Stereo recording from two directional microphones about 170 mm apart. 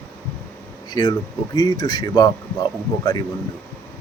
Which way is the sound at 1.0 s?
20° left (ahead or behind).